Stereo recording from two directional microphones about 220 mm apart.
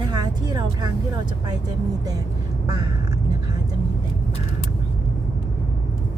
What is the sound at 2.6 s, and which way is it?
Speech, 15° right (ahead or behind).